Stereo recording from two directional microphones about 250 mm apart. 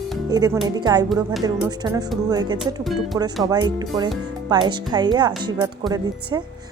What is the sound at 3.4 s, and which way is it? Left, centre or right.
A woman's voice, centre.